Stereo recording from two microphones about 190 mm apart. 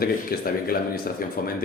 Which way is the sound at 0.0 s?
50° left (ahead or behind).